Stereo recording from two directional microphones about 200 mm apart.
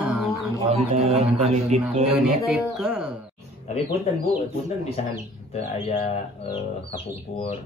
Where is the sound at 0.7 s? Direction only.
30° right (ahead or behind).